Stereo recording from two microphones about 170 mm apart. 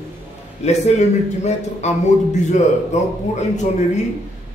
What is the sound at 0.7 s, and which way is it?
A man's voice, 40° left (ahead or behind).